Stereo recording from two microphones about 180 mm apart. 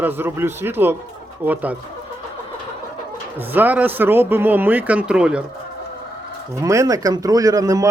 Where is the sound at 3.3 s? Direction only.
10° right (ahead or behind).